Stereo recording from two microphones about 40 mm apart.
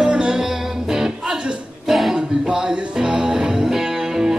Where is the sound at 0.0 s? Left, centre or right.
Right.